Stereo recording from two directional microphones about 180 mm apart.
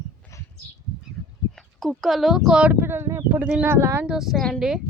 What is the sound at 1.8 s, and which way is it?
Speech, centre (ahead or behind).